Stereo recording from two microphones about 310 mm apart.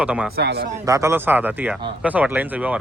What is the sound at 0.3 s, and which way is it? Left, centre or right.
Speech, right.